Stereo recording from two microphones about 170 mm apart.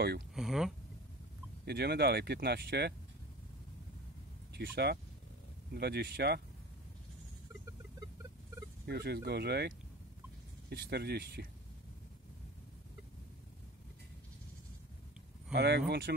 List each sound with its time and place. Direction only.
0.3 s speech: centre (ahead or behind)
1.7 s speech: 75° right (ahead or behind)
4.6 s speech: 75° right (ahead or behind)
8.8 s speech: 70° right (ahead or behind)
15.5 s speech: 75° right (ahead or behind)